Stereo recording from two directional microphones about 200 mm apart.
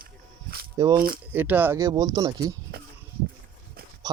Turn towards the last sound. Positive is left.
turn(degrees=-50)  # may be behind; listen again after turning